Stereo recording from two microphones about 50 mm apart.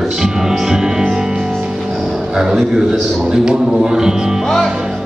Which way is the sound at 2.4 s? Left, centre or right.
Centre.